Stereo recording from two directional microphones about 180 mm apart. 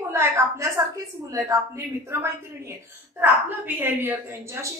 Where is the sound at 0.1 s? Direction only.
15° right (ahead or behind).